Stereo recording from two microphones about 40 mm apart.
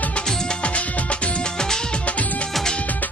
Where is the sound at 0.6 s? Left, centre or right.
Left; by 2.0 s centre.